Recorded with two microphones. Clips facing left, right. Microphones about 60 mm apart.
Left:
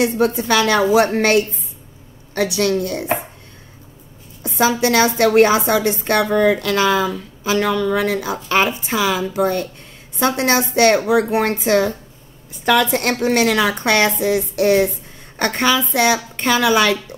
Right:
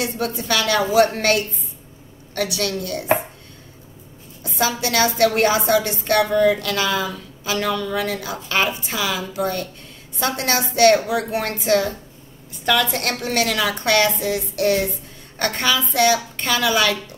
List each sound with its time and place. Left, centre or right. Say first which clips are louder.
0.0 s a woman's voice: left 8 dB; left
4.4 s a woman's voice: left 6 dB; left